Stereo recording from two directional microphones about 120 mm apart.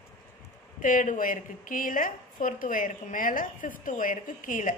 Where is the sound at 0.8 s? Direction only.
90° left.